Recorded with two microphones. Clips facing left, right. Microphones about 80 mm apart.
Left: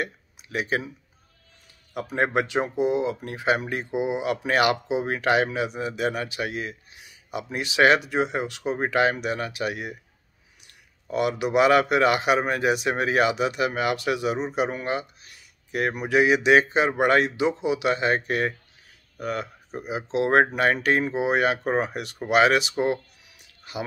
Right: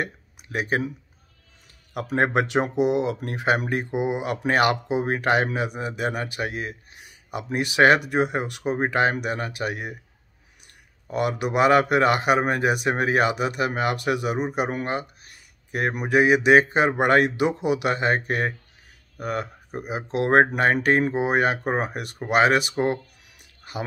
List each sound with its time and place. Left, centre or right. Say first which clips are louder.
0.0 s speech: right 1 dB; right
2.0 s speech: right 2 dB; right
11.1 s speech: even; right
14.5 s a sound: even; right
16.0 s speech: right 2 dB; right